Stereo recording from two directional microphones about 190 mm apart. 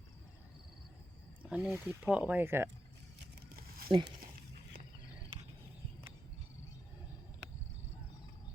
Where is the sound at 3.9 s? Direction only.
25° right (ahead or behind).